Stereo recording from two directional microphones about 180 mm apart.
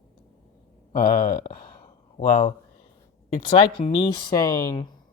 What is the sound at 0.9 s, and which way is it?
Speech, 50° left (ahead or behind).